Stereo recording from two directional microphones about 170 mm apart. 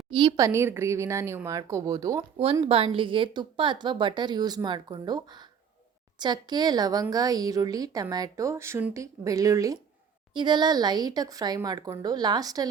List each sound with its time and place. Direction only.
0.1 s a woman's voice: 25° right (ahead or behind)
2.6 s a woman's voice: 35° right (ahead or behind)